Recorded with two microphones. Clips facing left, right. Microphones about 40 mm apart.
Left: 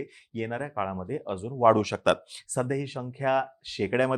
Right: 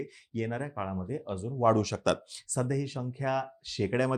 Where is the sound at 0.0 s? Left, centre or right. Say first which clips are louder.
Left 1 dB; centre.